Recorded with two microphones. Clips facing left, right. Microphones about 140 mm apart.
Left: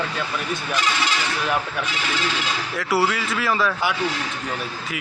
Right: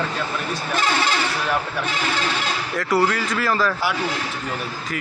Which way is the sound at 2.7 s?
5° left (ahead or behind).